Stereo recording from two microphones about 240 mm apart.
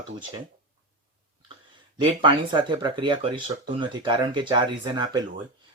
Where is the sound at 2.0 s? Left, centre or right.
Centre.